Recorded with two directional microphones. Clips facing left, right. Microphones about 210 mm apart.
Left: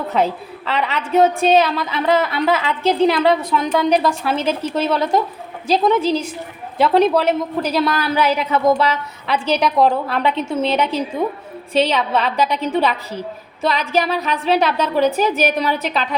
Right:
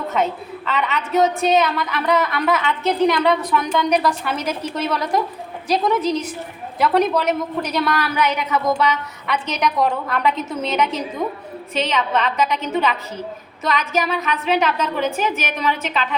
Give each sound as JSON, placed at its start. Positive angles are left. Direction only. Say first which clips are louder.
{"t": 0.1, "sound": "a woman's voice", "louder": "left 3 dB", "side_deg": 35}